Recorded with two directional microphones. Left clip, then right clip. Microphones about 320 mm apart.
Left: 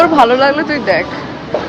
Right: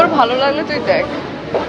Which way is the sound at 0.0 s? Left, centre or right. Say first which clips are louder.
Left 4 dB; centre.